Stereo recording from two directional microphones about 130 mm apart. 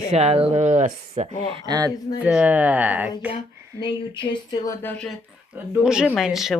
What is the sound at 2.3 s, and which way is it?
Speech, 10° right (ahead or behind).